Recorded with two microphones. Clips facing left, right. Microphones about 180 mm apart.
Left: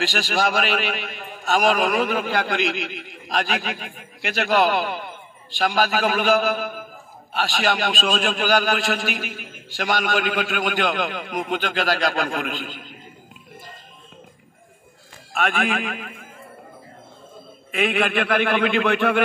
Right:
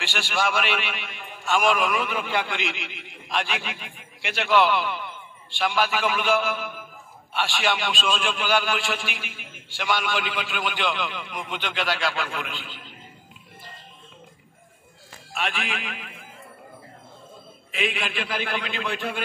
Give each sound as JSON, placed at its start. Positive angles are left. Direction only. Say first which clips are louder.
{"t": 0.0, "sound": "a man's voice", "louder": "left 4 dB", "side_deg": 40}
{"t": 15.3, "sound": "a man's voice", "louder": "left 7 dB", "side_deg": 50}
{"t": 17.6, "sound": "a man's voice", "louder": "left 7 dB", "side_deg": 55}